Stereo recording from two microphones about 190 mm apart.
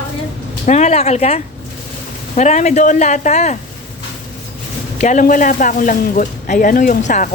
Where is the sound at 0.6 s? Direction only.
40° left (ahead or behind).